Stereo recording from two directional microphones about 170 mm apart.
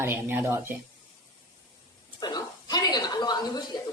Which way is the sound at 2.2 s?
25° left (ahead or behind).